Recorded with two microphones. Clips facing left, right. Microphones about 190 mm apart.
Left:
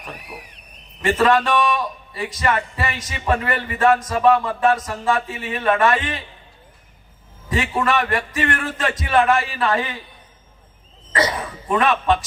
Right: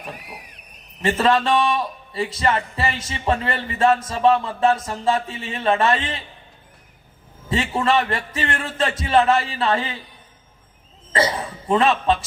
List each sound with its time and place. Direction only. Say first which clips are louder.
0.0 s vehicle: even; 25° right (ahead or behind)
1.0 s a man's voice: left 1 dB; 25° right (ahead or behind)
7.5 s a man's voice: right 1 dB; 25° right (ahead or behind)
11.1 s speech: even; 25° right (ahead or behind)